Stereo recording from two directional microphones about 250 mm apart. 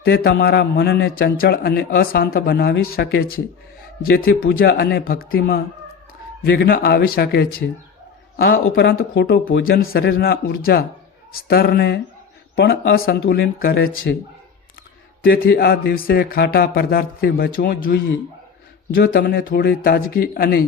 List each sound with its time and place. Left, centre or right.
0.0 s a man's voice: left
8.7 s a man's voice: left
15.2 s a man's voice: left
18.9 s a man's voice: left